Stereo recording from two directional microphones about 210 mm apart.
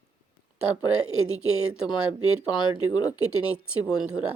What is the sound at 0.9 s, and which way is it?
Speech, 80° right.